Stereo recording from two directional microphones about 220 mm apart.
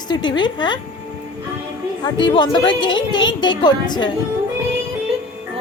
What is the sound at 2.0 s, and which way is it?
Speech, 20° left (ahead or behind).